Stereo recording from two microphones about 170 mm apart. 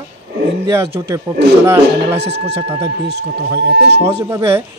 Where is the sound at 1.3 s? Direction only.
25° right (ahead or behind).